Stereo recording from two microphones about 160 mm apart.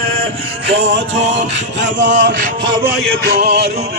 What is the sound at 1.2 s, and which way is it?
Speech, 45° right (ahead or behind).